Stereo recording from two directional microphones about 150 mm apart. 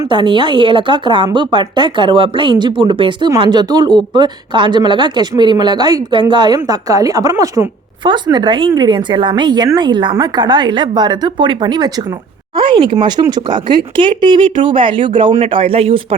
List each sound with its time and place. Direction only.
0.1 s a woman's voice: 30° right (ahead or behind)